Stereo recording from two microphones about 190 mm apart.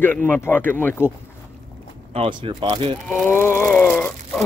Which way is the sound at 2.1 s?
25° right (ahead or behind).